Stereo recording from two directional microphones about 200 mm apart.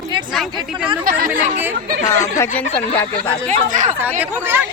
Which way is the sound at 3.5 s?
40° right (ahead or behind).